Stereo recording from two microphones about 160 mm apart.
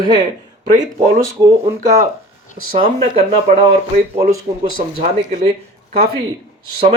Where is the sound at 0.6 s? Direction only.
50° right (ahead or behind).